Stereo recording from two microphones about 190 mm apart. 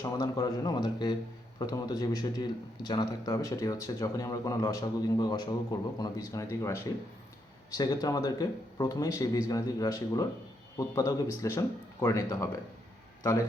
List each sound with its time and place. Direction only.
0.0 s a man's voice: 20° left (ahead or behind)